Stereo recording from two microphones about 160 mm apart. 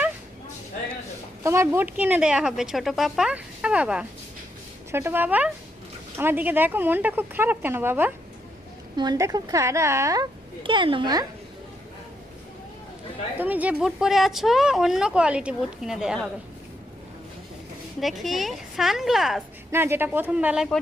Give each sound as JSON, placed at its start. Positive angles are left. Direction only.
{"t": 1.5, "sound": "speech", "side_deg": -15}
{"t": 9.0, "sound": "a woman's voice", "side_deg": -25}
{"t": 10.6, "sound": "speech", "side_deg": -30}
{"t": 13.4, "sound": "speech", "side_deg": -10}
{"t": 18.0, "sound": "speech", "side_deg": 0}
{"t": 19.7, "sound": "speech", "side_deg": -15}